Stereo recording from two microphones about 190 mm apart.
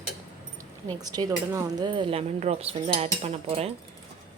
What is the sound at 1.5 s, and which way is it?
Cutlery, 20° right (ahead or behind).